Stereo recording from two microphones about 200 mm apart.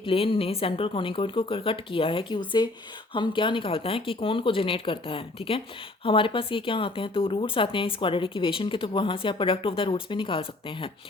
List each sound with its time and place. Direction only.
0.0 s speech: 25° left (ahead or behind)